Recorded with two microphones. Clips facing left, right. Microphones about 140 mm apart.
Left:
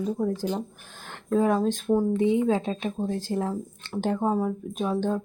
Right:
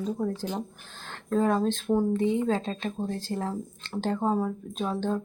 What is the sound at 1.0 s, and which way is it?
Speech, 15° left (ahead or behind).